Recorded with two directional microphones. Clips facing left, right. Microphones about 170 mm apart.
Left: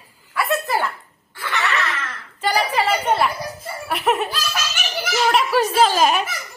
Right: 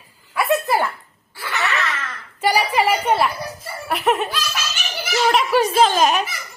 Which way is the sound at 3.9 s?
Centre (ahead or behind).